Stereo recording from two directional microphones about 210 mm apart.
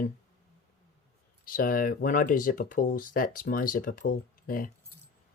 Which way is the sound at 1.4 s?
40° left (ahead or behind).